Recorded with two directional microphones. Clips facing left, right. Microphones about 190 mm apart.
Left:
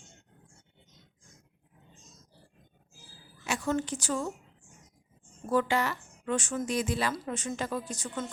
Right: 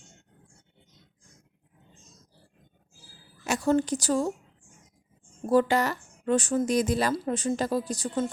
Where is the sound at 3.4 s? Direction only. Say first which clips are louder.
Right 6 dB; 40° right (ahead or behind).